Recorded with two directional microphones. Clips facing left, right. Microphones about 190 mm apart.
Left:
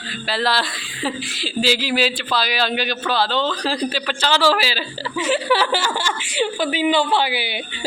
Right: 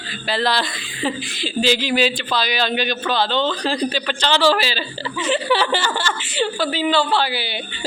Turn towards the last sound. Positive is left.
turn(degrees=15)  # may be behind; listen again after turning